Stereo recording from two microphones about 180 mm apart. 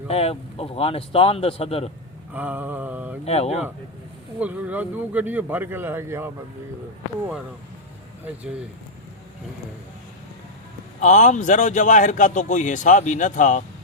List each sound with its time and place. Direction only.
0.1 s a man's voice: 35° left (ahead or behind)
2.3 s speech: 10° right (ahead or behind)
3.2 s a man's voice: 35° left (ahead or behind)
4.4 s speech: 10° right (ahead or behind)
8.2 s speech: 5° right (ahead or behind)
11.0 s speech: 40° left (ahead or behind)